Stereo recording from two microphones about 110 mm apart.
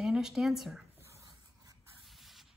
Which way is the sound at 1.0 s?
25° right (ahead or behind).